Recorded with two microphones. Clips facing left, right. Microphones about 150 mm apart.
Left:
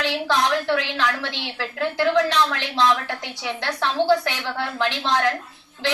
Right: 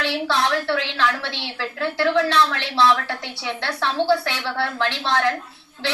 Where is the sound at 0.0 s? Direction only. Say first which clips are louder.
Even; 15° left (ahead or behind).